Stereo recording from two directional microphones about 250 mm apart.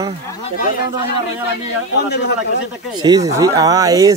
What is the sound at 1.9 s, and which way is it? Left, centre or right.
Speech, left.